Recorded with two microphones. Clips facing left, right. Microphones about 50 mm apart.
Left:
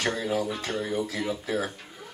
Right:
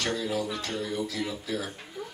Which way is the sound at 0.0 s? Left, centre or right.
Left.